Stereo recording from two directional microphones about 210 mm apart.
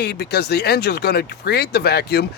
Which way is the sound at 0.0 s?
50° left (ahead or behind).